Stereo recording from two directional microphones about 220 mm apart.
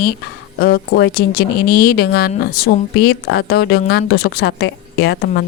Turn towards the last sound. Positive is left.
turn(degrees=50)  # may be behind; listen again after turning